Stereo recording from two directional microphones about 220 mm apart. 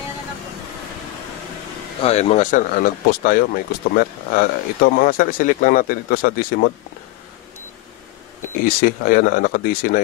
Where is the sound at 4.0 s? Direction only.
40° left (ahead or behind).